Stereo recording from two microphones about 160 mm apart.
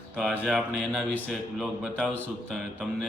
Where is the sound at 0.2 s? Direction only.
Centre (ahead or behind).